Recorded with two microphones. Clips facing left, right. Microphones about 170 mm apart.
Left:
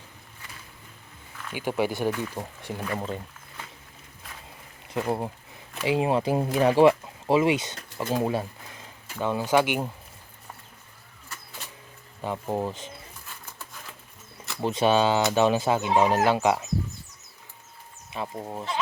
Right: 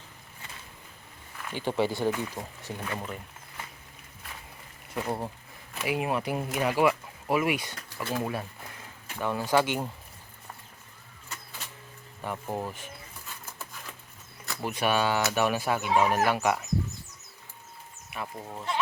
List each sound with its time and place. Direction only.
1.5 s speech: 10° left (ahead or behind); by 3.2 s 25° left (ahead or behind)
4.9 s speech: 20° left (ahead or behind)
12.2 s speech: 20° left (ahead or behind)
14.6 s speech: 25° left (ahead or behind)
18.1 s speech: 25° left (ahead or behind)